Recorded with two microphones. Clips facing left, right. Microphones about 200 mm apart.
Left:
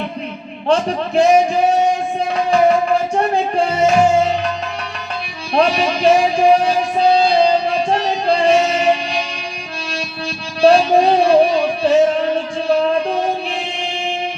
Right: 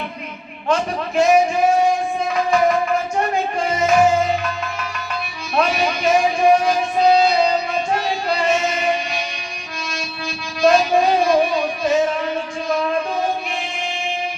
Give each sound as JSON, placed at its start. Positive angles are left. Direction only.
{"t": 0.7, "sound": "speech", "side_deg": 35}
{"t": 2.3, "sound": "music", "side_deg": 30}
{"t": 10.6, "sound": "music", "side_deg": 35}